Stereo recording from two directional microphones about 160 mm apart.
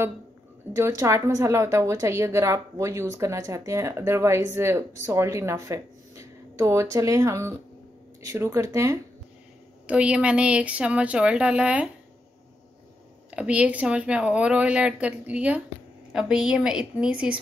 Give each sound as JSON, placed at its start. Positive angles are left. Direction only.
{"t": 0.7, "sound": "a woman's voice", "side_deg": -20}
{"t": 9.8, "sound": "a woman's voice", "side_deg": -5}
{"t": 13.3, "sound": "a woman's voice", "side_deg": -10}